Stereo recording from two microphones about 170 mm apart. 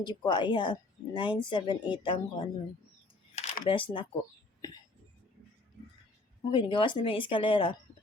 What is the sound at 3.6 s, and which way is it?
Speech, 30° left (ahead or behind).